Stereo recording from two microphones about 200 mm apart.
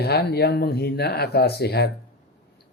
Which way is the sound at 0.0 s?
55° left (ahead or behind).